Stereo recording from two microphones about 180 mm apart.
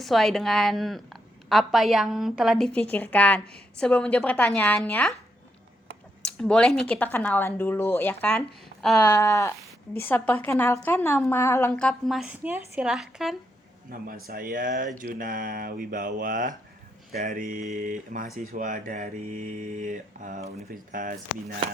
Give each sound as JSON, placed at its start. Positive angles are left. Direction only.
{"t": 0.0, "sound": "a woman's voice", "side_deg": 0}
{"t": 6.2, "sound": "speech", "side_deg": 5}
{"t": 9.1, "sound": "speech", "side_deg": 15}
{"t": 12.4, "sound": "a woman's voice", "side_deg": -10}
{"t": 13.9, "sound": "speech", "side_deg": -50}